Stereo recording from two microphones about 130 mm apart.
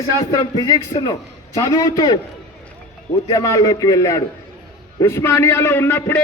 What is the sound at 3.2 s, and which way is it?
A man's voice, 30° left (ahead or behind).